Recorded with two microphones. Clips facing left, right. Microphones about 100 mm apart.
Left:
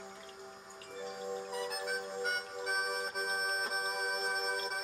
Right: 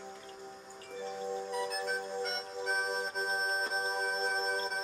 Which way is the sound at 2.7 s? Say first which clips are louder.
Right 1 dB; 35° right (ahead or behind).